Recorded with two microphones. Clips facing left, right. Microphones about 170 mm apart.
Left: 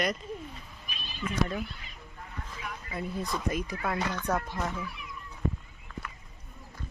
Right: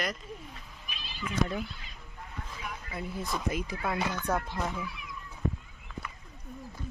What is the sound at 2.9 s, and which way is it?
Speech, 5° right (ahead or behind).